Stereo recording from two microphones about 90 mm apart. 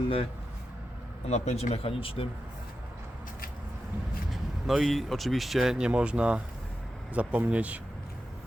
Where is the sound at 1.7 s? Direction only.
90° left.